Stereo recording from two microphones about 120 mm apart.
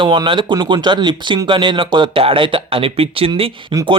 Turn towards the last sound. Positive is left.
turn(degrees=-50)  # may be behind; listen again after turning